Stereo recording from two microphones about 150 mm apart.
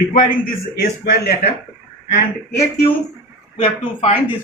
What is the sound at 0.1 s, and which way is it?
A man's voice, 80° left.